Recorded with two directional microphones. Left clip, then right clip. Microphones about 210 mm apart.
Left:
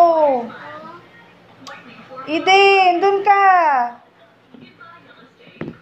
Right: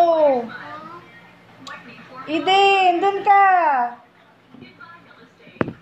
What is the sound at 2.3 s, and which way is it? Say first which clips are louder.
A woman's voice: left 3 dB; 10° left (ahead or behind).